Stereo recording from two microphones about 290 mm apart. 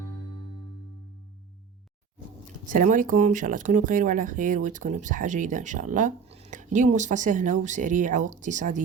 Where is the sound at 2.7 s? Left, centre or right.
Right.